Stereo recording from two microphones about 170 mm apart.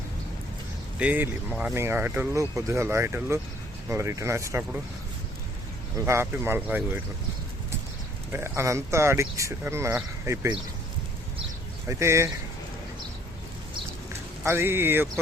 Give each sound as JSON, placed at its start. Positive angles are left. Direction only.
{"t": 0.9, "sound": "speech", "side_deg": -10}
{"t": 6.1, "sound": "speech", "side_deg": -15}
{"t": 8.3, "sound": "speech", "side_deg": -15}
{"t": 11.9, "sound": "speech", "side_deg": -15}
{"t": 14.4, "sound": "speech", "side_deg": -15}